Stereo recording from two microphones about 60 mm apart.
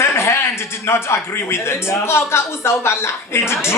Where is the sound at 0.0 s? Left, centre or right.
Left.